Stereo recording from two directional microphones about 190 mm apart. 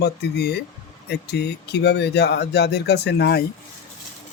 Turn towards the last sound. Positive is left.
turn(degrees=60)  # may be behind; listen again after turning